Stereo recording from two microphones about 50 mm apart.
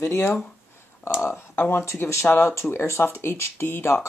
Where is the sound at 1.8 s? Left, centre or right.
Left.